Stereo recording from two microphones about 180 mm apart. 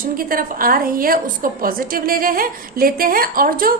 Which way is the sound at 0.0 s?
50° right (ahead or behind).